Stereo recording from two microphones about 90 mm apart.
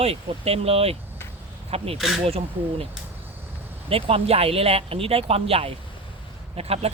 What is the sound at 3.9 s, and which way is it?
Speech, 90° right.